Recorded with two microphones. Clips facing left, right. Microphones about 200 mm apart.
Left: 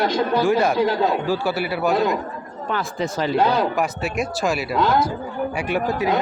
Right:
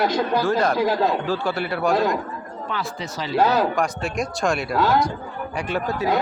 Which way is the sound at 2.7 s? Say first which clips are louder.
Left 6 dB; 50° left (ahead or behind).